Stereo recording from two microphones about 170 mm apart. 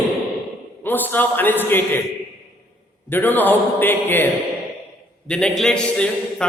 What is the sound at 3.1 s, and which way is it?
A man's voice, 10° left (ahead or behind).